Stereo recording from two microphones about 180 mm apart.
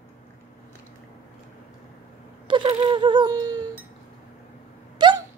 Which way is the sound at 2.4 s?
25° right (ahead or behind).